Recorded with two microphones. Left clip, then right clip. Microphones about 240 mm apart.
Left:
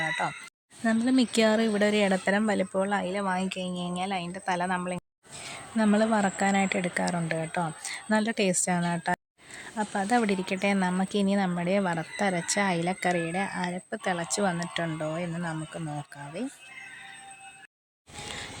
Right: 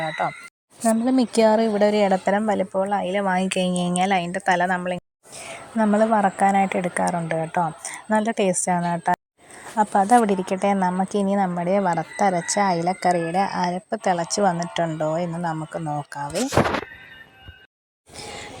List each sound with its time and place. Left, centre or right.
0.0 s speech: centre
3.1 s speech: centre
5.7 s speech: centre
9.7 s speech: centre